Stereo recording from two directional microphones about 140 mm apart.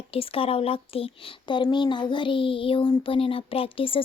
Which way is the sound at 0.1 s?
40° left (ahead or behind).